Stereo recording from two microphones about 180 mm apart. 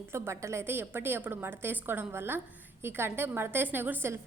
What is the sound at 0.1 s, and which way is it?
A woman's voice, 15° right (ahead or behind).